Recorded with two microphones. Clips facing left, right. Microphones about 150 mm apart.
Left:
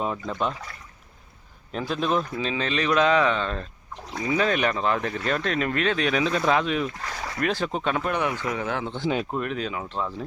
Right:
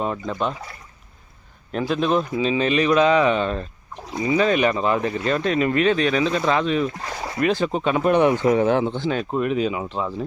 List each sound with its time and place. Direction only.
0.0 s speech: centre (ahead or behind)
1.7 s speech: centre (ahead or behind)
8.0 s speech: 25° right (ahead or behind)
9.0 s speech: 10° left (ahead or behind)
9.3 s speech: 5° right (ahead or behind)